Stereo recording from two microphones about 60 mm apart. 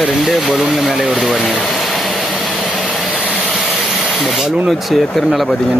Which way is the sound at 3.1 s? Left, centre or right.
Centre.